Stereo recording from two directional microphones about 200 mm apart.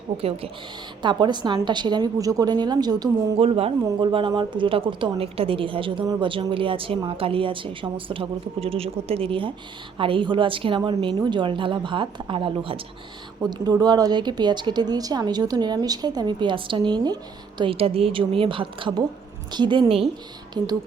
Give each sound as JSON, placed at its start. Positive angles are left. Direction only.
{"t": 0.2, "sound": "a woman's voice", "side_deg": -30}